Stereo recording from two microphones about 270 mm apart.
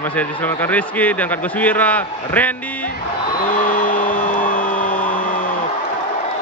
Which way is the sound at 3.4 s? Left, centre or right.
Left.